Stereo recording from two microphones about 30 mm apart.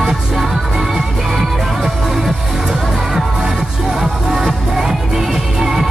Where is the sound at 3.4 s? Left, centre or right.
Centre.